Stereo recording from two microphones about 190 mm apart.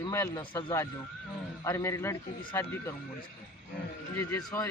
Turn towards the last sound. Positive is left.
turn(degrees=15)  # may be behind; listen again after turning